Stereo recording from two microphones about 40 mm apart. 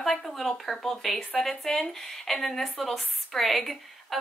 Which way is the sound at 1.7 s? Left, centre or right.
Centre.